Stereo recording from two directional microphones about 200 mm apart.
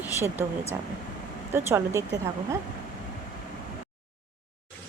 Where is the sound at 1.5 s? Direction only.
10° right (ahead or behind).